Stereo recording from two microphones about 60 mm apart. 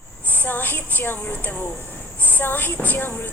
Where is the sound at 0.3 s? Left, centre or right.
Left.